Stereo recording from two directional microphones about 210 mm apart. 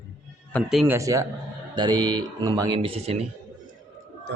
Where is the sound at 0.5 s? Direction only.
Centre (ahead or behind).